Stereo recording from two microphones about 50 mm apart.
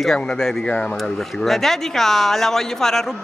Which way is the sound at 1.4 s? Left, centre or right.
Centre.